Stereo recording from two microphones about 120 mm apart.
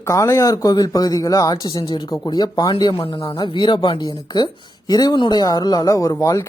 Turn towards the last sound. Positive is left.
turn(degrees=25)  # may be behind; listen again after turning